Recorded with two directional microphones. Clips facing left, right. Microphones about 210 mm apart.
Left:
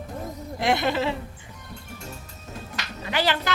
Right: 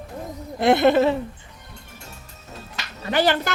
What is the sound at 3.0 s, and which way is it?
Speech, 50° right (ahead or behind).